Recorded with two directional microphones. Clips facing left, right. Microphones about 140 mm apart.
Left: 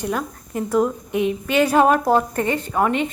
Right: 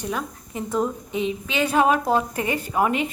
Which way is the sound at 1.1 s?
60° left (ahead or behind).